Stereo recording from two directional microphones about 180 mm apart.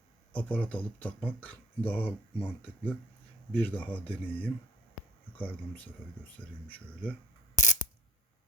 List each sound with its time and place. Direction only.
0.3 s speech: 5° left (ahead or behind)
7.5 s mechanisms: 45° left (ahead or behind)